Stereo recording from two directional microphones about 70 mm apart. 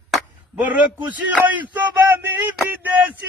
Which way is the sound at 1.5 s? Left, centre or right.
Right.